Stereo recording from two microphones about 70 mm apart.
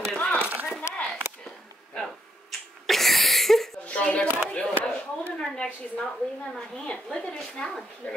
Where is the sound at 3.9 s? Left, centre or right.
Centre.